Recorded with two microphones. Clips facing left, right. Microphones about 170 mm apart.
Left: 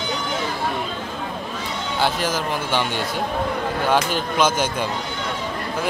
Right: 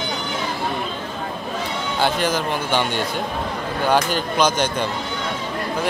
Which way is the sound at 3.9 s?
Centre (ahead or behind).